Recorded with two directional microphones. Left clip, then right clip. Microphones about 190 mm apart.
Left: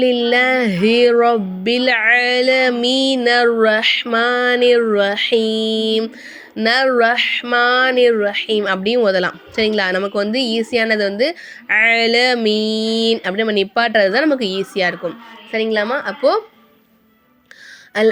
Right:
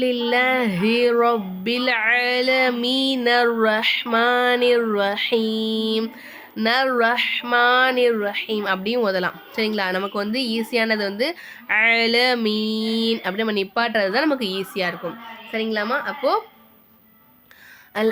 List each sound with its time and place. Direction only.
0.0 s a woman's voice: 15° left (ahead or behind)
18.0 s speech: 15° left (ahead or behind)